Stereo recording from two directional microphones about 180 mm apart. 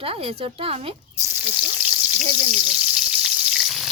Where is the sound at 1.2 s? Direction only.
10° right (ahead or behind).